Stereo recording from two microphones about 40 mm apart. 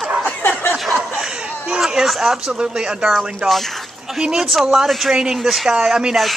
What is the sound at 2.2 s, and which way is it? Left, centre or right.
Speech, centre.